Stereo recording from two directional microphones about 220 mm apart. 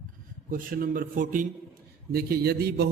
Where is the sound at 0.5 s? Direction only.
40° right (ahead or behind).